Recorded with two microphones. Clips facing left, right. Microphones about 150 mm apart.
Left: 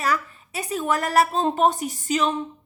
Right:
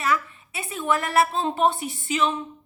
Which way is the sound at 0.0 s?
40° left (ahead or behind).